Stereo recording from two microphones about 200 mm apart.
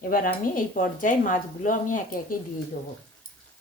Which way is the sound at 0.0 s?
45° left (ahead or behind).